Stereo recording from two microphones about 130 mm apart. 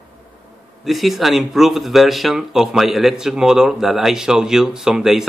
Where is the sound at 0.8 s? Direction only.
Centre (ahead or behind).